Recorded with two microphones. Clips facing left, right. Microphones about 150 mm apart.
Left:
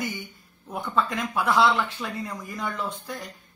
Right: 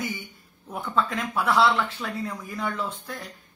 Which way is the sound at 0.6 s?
5° left (ahead or behind).